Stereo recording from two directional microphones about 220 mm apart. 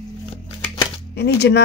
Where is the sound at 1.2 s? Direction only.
50° left (ahead or behind).